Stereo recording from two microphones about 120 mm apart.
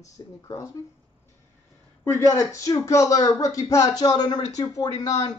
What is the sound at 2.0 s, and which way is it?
Speech, 25° left (ahead or behind).